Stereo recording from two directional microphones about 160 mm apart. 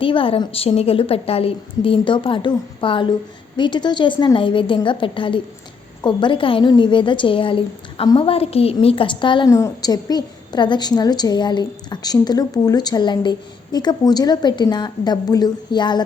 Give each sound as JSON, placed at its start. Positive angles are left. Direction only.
{"t": 0.0, "sound": "a woman's voice", "side_deg": 35}